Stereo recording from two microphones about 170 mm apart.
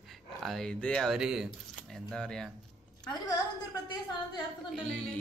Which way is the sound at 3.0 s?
20° left (ahead or behind).